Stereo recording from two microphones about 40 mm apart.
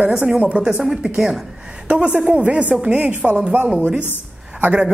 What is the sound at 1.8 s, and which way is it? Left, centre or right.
A woman's voice, right.